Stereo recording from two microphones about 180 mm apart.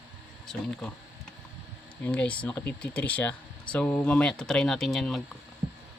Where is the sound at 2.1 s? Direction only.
10° left (ahead or behind).